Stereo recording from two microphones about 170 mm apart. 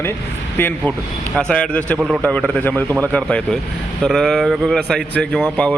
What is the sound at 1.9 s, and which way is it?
Speech, 5° right (ahead or behind).